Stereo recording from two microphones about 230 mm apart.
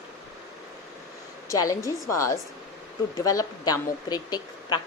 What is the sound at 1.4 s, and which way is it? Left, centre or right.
A woman's voice, centre.